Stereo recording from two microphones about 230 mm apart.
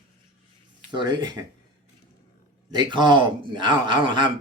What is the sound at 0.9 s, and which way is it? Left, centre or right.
Speech, centre.